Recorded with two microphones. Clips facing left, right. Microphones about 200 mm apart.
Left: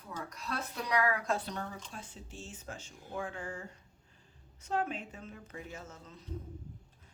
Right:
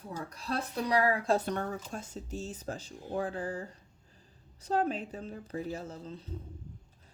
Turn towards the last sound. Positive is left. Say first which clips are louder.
# right 8 dB
turn(degrees=-30)  # may be behind; listen again after turning